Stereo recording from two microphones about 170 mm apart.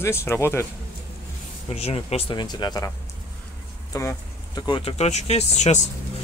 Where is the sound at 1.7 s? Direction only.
35° left (ahead or behind).